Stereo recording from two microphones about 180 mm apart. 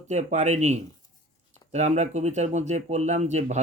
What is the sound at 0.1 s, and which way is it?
Speech, 40° right (ahead or behind).